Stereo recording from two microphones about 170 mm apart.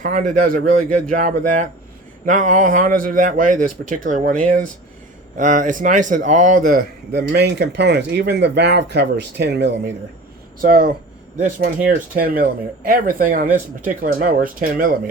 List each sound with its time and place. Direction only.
0.0 s a man's voice: 50° right (ahead or behind); by 9.9 s 90° right
10.6 s speech: 60° right (ahead or behind)